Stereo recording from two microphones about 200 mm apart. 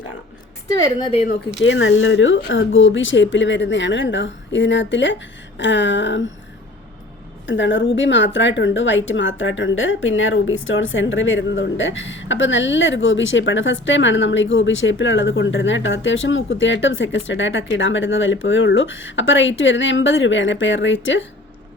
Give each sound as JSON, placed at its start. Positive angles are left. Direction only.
{"t": 1.6, "sound": "speech", "side_deg": 70}
{"t": 5.5, "sound": "a sound", "side_deg": 65}
{"t": 7.4, "sound": "speech", "side_deg": 65}